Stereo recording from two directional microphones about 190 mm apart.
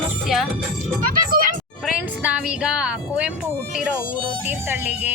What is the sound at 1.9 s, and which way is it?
Music, 5° right (ahead or behind).